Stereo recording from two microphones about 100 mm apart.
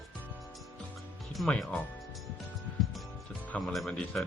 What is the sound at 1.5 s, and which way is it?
Speech, 10° left (ahead or behind).